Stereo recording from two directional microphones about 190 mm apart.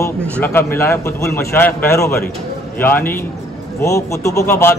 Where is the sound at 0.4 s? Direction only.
10° left (ahead or behind).